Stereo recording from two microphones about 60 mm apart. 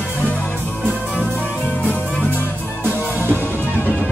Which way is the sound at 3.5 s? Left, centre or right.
Right.